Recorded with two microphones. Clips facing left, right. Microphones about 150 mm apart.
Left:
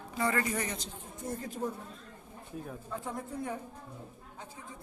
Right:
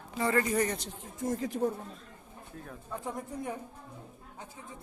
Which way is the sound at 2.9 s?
20° right (ahead or behind).